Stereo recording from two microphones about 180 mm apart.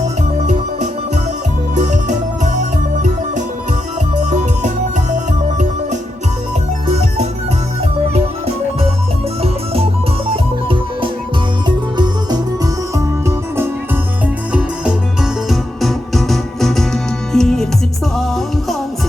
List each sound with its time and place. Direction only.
1.7 s music: 40° right (ahead or behind)
10.2 s music: 30° right (ahead or behind)
14.5 s music: 5° right (ahead or behind)